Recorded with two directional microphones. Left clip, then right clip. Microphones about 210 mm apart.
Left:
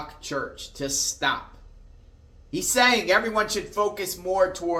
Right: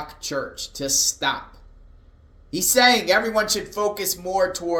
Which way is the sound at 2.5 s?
30° right (ahead or behind).